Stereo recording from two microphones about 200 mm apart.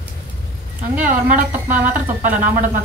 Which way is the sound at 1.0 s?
40° right (ahead or behind).